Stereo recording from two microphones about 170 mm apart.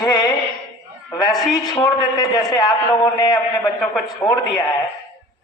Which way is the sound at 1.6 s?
25° left (ahead or behind).